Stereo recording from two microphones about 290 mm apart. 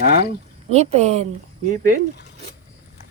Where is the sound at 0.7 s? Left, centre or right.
Right.